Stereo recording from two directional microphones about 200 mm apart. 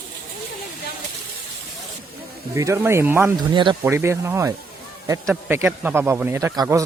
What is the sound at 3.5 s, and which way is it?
Speech, 25° right (ahead or behind).